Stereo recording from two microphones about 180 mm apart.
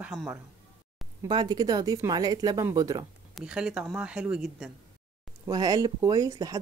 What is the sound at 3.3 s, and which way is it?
Speech, 5° right (ahead or behind).